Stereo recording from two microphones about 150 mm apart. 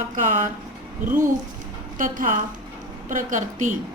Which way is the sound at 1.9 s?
65° right (ahead or behind).